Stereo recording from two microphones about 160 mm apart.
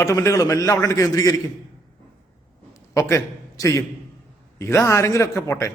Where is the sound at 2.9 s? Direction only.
20° left (ahead or behind).